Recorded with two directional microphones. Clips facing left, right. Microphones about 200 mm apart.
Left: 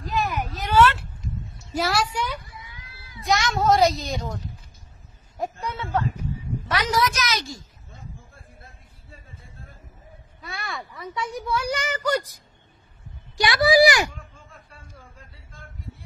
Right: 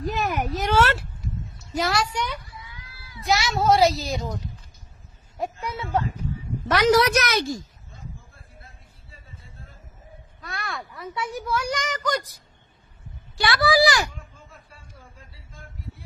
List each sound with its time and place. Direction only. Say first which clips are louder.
0.1 s a sound: left 2 dB; 50° right (ahead or behind)
1.7 s speech: even; 5° left (ahead or behind)
3.3 s a woman's voice: even; 5° right (ahead or behind)
5.4 s speech: even; 10° right (ahead or behind)
6.8 s a woman's voice: right 7 dB; 70° right (ahead or behind)
10.4 s a woman's voice: even; centre (ahead or behind)
13.4 s a child's voice: left 3 dB; 20° left (ahead or behind)